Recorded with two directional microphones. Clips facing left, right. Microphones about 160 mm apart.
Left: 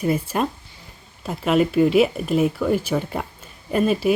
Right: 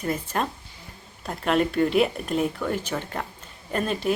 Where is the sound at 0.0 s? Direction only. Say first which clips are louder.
Left 5 dB; 10° left (ahead or behind).